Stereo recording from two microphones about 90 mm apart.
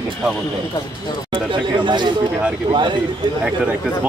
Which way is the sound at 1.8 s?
55° right (ahead or behind).